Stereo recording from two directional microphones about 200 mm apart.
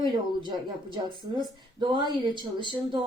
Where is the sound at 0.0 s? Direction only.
25° right (ahead or behind).